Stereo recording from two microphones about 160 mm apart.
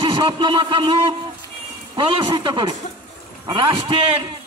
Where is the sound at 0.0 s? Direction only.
30° right (ahead or behind).